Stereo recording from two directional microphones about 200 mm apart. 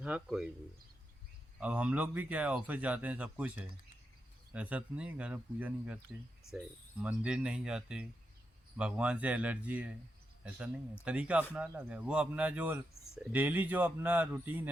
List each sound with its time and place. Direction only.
0.0 s speech: 5° right (ahead or behind)
1.5 s speech: 5° right (ahead or behind)
11.0 s speech: 5° right (ahead or behind)